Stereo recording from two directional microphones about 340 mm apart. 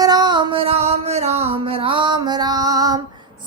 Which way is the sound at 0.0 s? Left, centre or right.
Centre.